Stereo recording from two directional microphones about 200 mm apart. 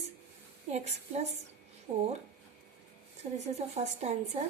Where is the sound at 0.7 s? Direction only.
35° right (ahead or behind).